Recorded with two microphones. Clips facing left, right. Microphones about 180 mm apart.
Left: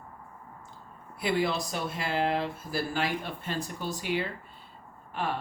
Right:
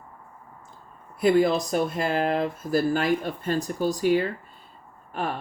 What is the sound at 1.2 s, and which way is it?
Speech, 45° right (ahead or behind).